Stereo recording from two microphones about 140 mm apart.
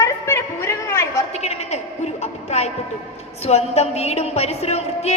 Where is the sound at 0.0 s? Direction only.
20° left (ahead or behind).